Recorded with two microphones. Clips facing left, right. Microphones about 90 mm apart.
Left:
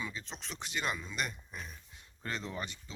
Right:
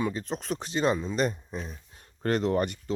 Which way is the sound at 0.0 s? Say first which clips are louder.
Right 12 dB; 50° right (ahead or behind).